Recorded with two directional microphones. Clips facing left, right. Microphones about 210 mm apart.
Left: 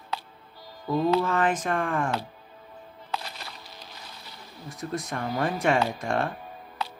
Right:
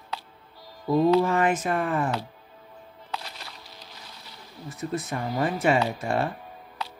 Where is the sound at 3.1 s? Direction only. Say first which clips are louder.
Left 2 dB; 55° left (ahead or behind).